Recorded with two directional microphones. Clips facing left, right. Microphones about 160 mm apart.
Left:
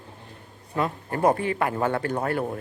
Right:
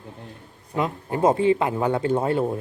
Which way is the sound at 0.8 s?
20° right (ahead or behind).